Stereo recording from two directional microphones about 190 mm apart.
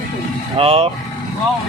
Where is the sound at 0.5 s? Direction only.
30° right (ahead or behind).